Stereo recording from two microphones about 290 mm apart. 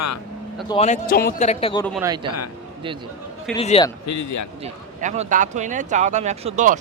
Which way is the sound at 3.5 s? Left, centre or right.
Centre.